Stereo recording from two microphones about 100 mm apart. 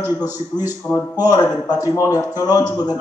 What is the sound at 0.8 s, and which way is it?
Speech, 15° left (ahead or behind).